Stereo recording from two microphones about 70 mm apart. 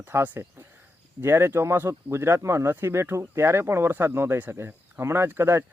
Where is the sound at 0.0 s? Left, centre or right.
Right.